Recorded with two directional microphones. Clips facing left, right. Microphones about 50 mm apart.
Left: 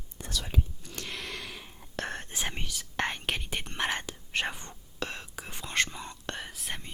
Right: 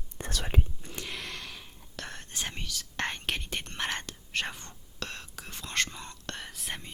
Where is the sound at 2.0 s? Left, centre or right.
Left.